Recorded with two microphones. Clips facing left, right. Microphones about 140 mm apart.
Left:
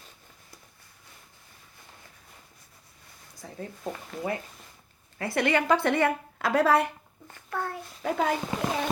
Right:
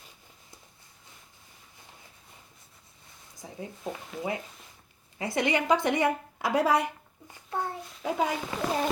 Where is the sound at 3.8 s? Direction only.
Centre (ahead or behind).